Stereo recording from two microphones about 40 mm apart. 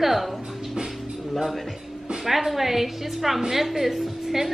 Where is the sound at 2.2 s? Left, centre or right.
Centre.